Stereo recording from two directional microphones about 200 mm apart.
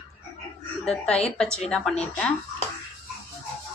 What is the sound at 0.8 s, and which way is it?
A woman's voice, 5° left (ahead or behind).